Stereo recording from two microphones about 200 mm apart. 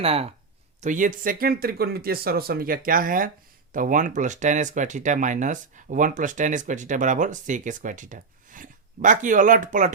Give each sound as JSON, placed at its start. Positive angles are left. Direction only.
{"t": 0.0, "sound": "speech", "side_deg": -30}
{"t": 0.8, "sound": "speech", "side_deg": -40}